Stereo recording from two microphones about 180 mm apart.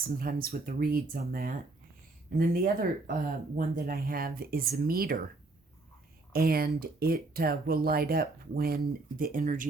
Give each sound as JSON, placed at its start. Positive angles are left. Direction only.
{"t": 0.2, "sound": "speech", "side_deg": -50}
{"t": 6.3, "sound": "speech", "side_deg": -60}